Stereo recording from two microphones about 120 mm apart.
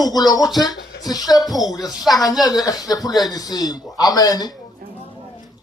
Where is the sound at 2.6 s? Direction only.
30° left (ahead or behind).